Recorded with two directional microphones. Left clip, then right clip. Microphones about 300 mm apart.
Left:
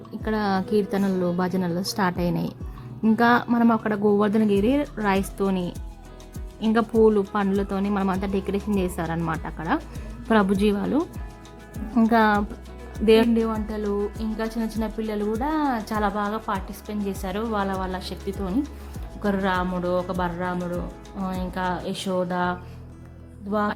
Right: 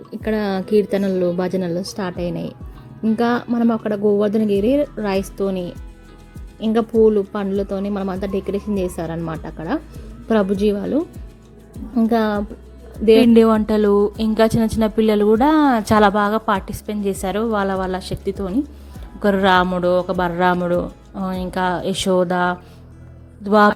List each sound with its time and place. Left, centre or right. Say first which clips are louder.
0.3 s speech: right 4 dB; centre
1.8 s a woman's voice: even; centre
6.6 s speech: right 4 dB; centre
12.0 s speech: even; centre
13.3 s speech: right 12 dB; right